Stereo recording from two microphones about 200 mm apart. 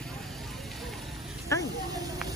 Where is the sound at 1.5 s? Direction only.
15° left (ahead or behind).